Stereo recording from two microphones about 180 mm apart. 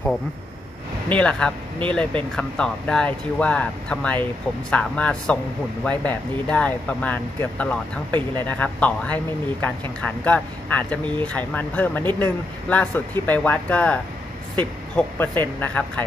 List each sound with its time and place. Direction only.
1.0 s speech: 5° left (ahead or behind)
15.0 s speech: 10° left (ahead or behind)